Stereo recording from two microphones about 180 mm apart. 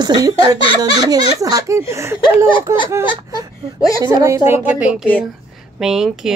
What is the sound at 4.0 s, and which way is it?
Speech, 20° right (ahead or behind).